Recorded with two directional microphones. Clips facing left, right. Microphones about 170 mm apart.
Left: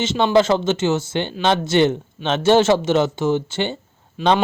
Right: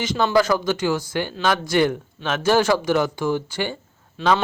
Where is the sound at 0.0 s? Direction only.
25° left (ahead or behind).